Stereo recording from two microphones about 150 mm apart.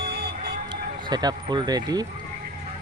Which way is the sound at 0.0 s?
90° right.